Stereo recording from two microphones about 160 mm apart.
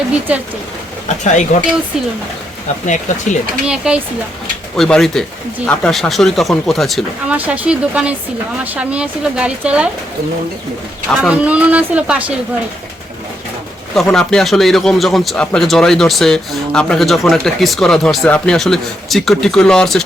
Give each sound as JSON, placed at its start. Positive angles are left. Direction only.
{"t": 1.0, "sound": "speech", "side_deg": 50}
{"t": 2.8, "sound": "speech", "side_deg": 50}
{"t": 3.7, "sound": "a man's voice", "side_deg": -5}
{"t": 11.2, "sound": "speech", "side_deg": -5}
{"t": 13.9, "sound": "a man's voice", "side_deg": 5}